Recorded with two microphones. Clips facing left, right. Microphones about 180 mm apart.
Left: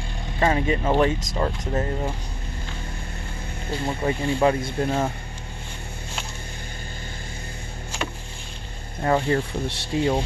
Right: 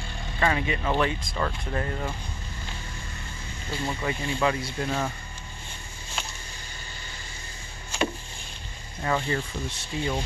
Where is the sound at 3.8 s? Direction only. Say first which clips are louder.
Left 5 dB; 40° left (ahead or behind).